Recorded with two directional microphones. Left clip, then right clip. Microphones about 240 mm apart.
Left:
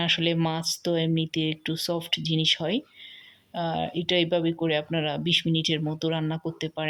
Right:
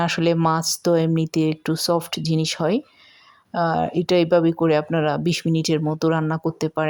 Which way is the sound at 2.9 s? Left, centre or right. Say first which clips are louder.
Left 4 dB; right.